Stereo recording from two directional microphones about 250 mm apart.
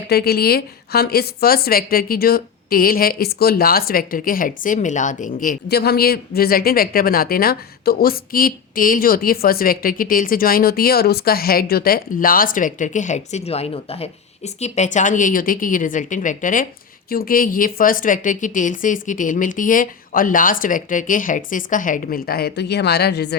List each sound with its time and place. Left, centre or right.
0.1 s a woman's voice: left